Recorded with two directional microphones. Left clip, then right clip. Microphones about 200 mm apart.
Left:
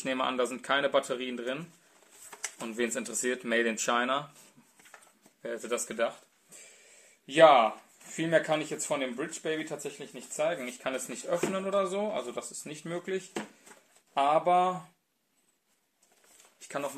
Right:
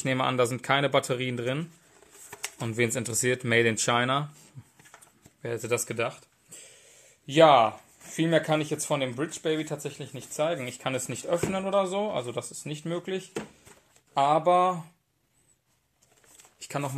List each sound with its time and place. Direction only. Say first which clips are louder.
0.0 s speech: right 4 dB; 35° right (ahead or behind)
5.4 s speech: right 4 dB; 40° right (ahead or behind)
16.6 s speech: right 2 dB; 40° right (ahead or behind)